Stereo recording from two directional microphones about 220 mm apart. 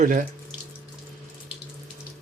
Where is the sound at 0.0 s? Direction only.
35° right (ahead or behind).